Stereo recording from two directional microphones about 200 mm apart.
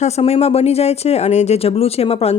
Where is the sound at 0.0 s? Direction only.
30° left (ahead or behind).